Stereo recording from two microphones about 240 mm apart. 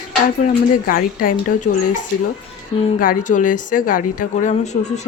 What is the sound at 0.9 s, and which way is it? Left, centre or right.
Speech, left.